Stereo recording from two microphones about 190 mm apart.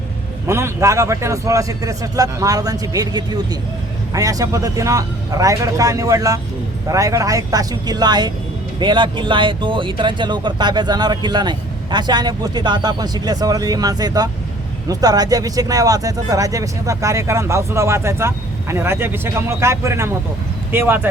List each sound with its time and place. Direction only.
0.4 s speech: 15° right (ahead or behind)